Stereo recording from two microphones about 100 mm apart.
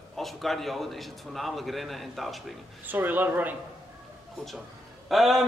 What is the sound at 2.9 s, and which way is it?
Speech, 20° right (ahead or behind).